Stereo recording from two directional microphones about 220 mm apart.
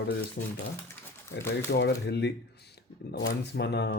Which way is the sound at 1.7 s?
50° left (ahead or behind).